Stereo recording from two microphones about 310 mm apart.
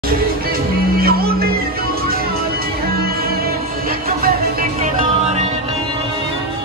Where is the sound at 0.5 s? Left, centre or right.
Right.